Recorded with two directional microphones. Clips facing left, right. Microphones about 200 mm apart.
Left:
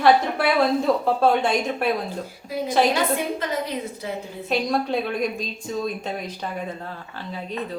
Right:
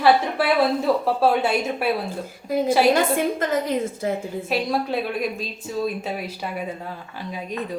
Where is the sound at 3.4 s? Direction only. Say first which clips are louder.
Right 5 dB; 50° right (ahead or behind).